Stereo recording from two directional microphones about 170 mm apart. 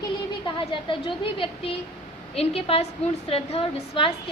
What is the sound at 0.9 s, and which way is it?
A woman's voice, 30° left (ahead or behind).